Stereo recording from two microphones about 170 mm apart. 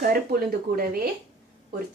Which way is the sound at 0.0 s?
60° right (ahead or behind).